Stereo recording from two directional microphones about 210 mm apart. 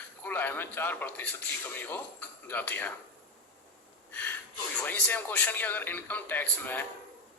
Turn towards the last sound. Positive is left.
turn(degrees=10)  # may be behind; listen again after turning